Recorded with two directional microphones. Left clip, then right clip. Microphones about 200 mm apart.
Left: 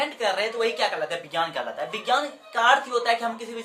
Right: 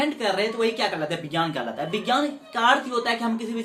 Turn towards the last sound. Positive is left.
turn(degrees=10)  # may be behind; listen again after turning